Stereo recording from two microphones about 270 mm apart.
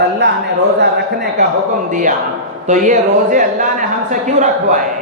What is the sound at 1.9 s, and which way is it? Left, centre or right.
Speech, right.